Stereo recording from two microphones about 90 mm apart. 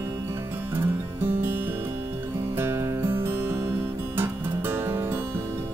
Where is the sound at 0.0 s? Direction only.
35° right (ahead or behind).